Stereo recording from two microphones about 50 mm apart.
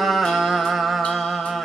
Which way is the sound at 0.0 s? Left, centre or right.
Centre.